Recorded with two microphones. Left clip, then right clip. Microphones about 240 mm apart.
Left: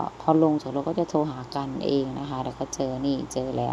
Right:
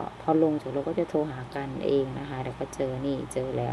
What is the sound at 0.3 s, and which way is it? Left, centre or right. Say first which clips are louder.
Speech: left 3 dB; centre.